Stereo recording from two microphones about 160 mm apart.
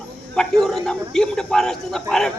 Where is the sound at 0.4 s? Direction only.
5° left (ahead or behind).